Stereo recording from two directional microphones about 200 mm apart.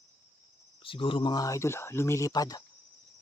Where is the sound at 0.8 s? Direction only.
25° left (ahead or behind).